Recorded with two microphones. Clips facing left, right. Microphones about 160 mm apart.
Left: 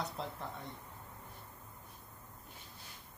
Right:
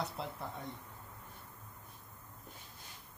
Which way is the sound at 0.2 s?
5° right (ahead or behind).